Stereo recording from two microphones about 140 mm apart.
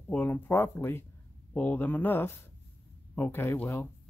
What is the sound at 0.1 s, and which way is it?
Speech, 15° left (ahead or behind).